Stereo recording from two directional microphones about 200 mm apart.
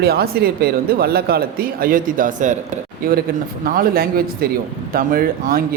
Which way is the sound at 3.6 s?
45° right (ahead or behind).